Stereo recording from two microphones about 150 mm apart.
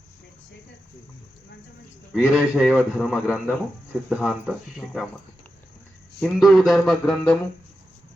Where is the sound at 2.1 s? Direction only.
5° right (ahead or behind).